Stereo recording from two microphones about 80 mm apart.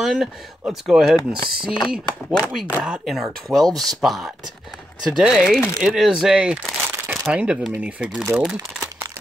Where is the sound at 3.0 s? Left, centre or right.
Centre.